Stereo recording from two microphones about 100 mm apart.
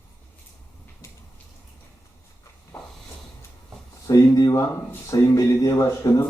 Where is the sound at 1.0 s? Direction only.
30° left (ahead or behind).